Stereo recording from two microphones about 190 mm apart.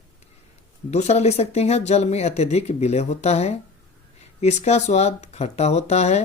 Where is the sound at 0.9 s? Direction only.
35° left (ahead or behind).